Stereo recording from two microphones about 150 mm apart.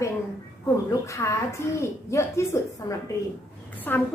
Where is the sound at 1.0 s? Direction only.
20° left (ahead or behind).